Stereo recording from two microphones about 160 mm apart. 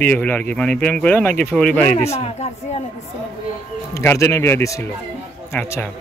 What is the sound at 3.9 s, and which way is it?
Speech, 20° left (ahead or behind).